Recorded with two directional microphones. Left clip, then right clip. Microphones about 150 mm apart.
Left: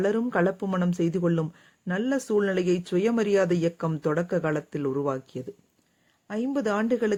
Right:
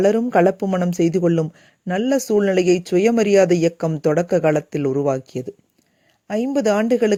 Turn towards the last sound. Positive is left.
turn(degrees=-40)  # may be behind; listen again after turning